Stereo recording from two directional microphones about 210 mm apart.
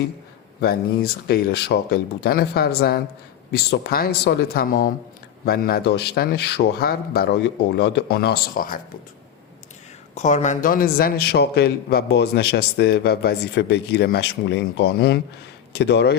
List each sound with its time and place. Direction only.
0.6 s a man's voice: 45° left (ahead or behind)
10.2 s a man's voice: 35° left (ahead or behind); by 16.1 s 50° left (ahead or behind)